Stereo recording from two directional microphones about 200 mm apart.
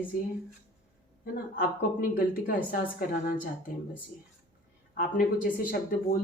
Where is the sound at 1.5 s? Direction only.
45° left (ahead or behind).